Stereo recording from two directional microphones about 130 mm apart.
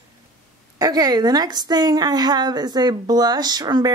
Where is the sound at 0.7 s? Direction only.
30° right (ahead or behind).